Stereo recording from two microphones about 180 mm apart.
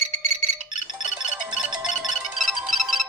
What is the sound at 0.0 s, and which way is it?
Music, 35° right (ahead or behind).